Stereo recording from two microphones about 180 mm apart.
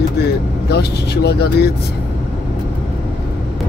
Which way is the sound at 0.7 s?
65° left (ahead or behind).